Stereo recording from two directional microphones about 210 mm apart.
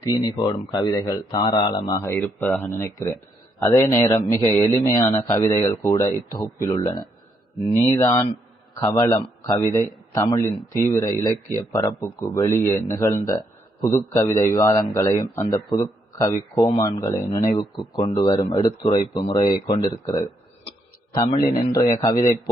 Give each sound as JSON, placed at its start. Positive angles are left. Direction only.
{"t": 0.0, "sound": "speech", "side_deg": 20}
{"t": 21.3, "sound": "a man's voice", "side_deg": 45}